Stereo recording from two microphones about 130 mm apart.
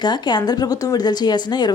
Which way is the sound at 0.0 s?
35° left (ahead or behind).